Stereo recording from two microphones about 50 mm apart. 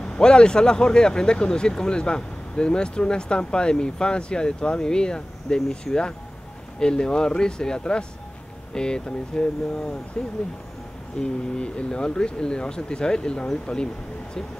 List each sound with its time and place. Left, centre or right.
0.0 s speech: centre
6.8 s speech: centre